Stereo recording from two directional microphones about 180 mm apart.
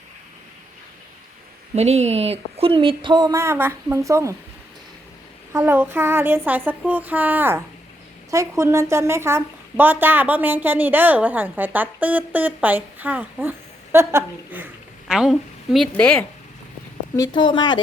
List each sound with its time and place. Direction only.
1.7 s speech: 35° right (ahead or behind); by 4.4 s 15° right (ahead or behind)
5.5 s a woman's voice: 10° right (ahead or behind)
15.0 s a woman's voice: centre (ahead or behind)
17.2 s a woman's voice: 25° left (ahead or behind)